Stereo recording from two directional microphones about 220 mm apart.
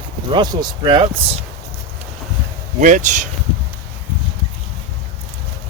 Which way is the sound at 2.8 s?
35° right (ahead or behind).